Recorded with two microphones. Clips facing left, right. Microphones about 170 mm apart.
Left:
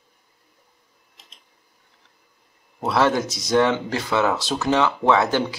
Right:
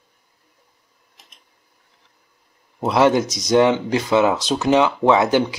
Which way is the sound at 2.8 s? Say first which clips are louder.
Right 4 dB; 15° right (ahead or behind).